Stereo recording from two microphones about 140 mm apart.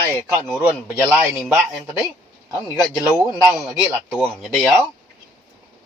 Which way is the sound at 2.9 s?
5° right (ahead or behind).